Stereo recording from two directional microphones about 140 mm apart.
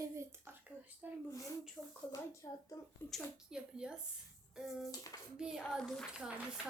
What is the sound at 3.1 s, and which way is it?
A woman's voice, 5° right (ahead or behind).